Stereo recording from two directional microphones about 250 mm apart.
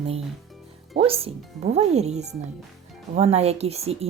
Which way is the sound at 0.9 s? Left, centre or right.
Right.